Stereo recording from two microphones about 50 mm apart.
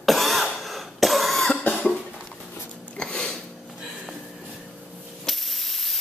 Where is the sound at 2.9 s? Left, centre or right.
Centre.